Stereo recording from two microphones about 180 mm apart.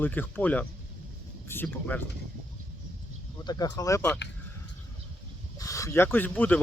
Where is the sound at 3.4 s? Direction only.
25° left (ahead or behind).